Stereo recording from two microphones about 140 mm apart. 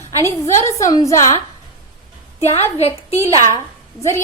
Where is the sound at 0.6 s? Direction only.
25° left (ahead or behind).